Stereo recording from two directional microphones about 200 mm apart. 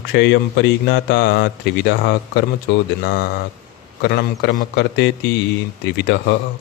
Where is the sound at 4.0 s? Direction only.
55° left (ahead or behind).